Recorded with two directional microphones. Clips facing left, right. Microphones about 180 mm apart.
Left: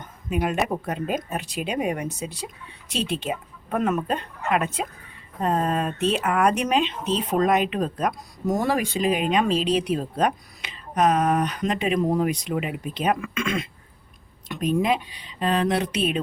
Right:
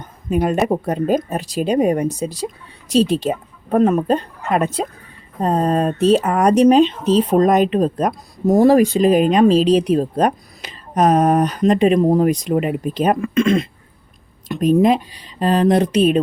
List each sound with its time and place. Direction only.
0.3 s speech: 40° right (ahead or behind)